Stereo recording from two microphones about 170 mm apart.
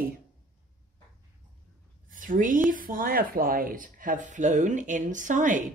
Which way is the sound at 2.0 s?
50° right (ahead or behind).